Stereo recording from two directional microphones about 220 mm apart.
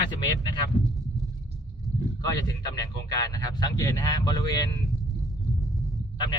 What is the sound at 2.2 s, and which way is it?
A man's voice, 20° left (ahead or behind).